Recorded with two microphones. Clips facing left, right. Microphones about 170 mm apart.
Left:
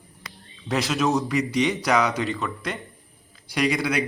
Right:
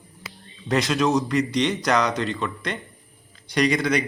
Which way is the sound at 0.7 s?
Centre (ahead or behind).